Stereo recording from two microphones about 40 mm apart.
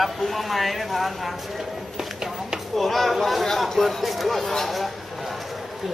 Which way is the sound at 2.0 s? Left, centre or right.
Centre.